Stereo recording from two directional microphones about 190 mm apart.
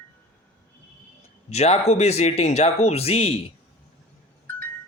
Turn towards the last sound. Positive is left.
turn(degrees=30)  # may be behind; listen again after turning